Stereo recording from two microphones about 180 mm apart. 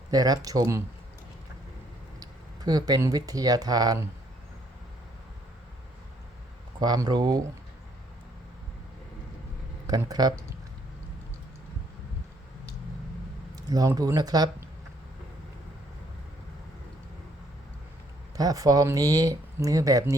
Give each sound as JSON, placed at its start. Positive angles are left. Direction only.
{"t": 0.1, "sound": "speech", "side_deg": -20}
{"t": 2.6, "sound": "speech", "side_deg": -20}
{"t": 6.7, "sound": "speech", "side_deg": -20}
{"t": 9.8, "sound": "speech", "side_deg": -20}
{"t": 13.6, "sound": "speech", "side_deg": -20}
{"t": 18.3, "sound": "speech", "side_deg": -20}